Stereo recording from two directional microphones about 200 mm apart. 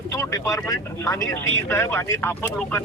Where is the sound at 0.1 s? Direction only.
15° left (ahead or behind).